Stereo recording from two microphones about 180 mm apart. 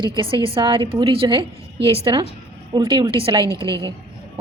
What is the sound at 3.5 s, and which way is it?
Speech, 15° left (ahead or behind).